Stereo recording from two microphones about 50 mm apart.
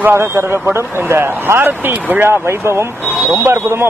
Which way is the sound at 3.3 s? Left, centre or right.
Right.